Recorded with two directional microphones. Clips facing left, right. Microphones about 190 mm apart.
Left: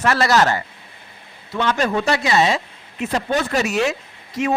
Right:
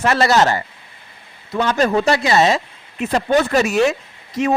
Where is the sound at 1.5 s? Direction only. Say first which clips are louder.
Right 3 dB; 35° right (ahead or behind).